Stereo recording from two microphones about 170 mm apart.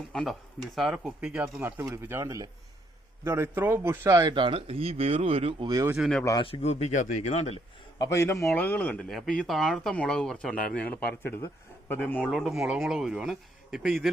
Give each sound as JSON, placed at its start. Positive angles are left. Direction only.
{"t": 0.1, "sound": "a man's voice", "side_deg": 0}
{"t": 6.0, "sound": "a man's voice", "side_deg": 5}
{"t": 6.2, "sound": "speech", "side_deg": 25}
{"t": 7.9, "sound": "a man's voice", "side_deg": 20}